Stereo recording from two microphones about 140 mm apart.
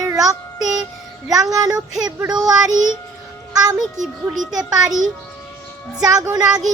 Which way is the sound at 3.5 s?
25° right (ahead or behind).